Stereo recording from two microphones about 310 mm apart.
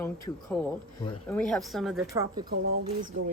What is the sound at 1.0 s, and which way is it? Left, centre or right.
Speech, centre.